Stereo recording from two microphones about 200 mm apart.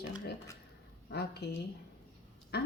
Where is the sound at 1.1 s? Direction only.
55° left (ahead or behind).